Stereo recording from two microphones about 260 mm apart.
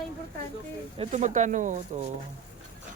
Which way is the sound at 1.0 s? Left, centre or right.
Right.